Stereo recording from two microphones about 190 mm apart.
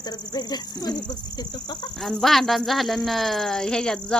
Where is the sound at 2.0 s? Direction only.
Centre (ahead or behind).